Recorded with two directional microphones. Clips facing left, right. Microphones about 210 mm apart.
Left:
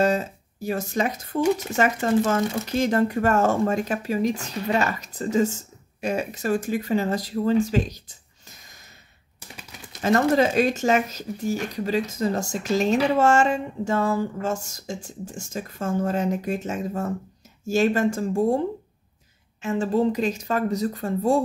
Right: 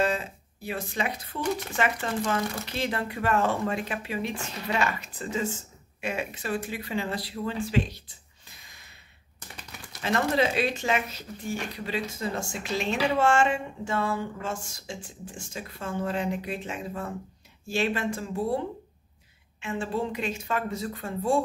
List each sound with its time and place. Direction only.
0.0 s speech: 40° left (ahead or behind)
10.0 s speech: 45° left (ahead or behind)
19.6 s speech: 40° left (ahead or behind)